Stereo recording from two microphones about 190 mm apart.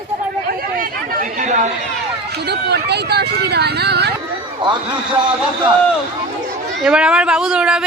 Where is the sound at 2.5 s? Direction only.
60° right (ahead or behind).